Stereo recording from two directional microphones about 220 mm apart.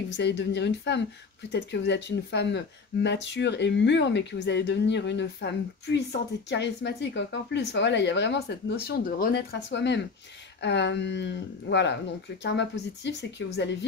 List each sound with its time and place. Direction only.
0.1 s speech: 50° left (ahead or behind)